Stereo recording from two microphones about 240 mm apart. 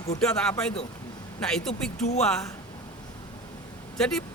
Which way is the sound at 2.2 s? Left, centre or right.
Centre.